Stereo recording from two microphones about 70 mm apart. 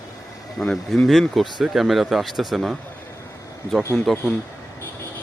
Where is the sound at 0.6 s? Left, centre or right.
Centre.